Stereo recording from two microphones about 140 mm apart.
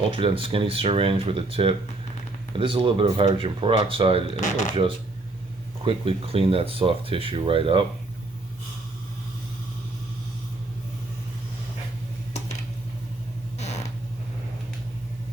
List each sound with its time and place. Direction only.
0.1 s speech: 40° right (ahead or behind)
4.4 s speech: 60° left (ahead or behind)
5.8 s speech: 40° right (ahead or behind)
13.6 s a sound: 50° left (ahead or behind)